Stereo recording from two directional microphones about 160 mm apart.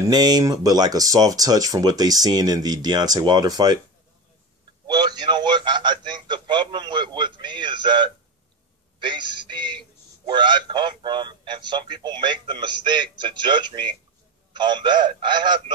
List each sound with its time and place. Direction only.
0.0 s speech: 25° right (ahead or behind)
4.8 s a sound: 25° right (ahead or behind)
9.0 s speech: 30° right (ahead or behind)